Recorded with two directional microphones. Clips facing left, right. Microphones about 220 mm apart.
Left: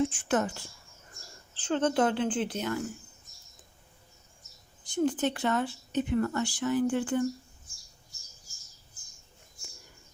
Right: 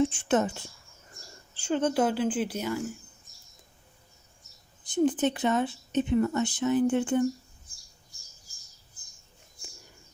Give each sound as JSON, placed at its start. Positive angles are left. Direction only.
{"t": 0.1, "sound": "speech", "side_deg": -25}
{"t": 1.5, "sound": "a woman's voice", "side_deg": -10}
{"t": 4.8, "sound": "speech", "side_deg": -20}